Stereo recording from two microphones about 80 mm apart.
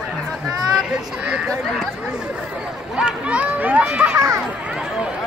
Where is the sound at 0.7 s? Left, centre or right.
Centre.